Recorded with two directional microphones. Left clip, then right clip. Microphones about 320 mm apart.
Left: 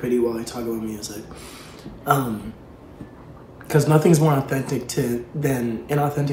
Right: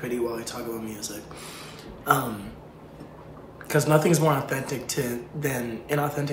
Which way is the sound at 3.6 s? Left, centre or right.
Centre.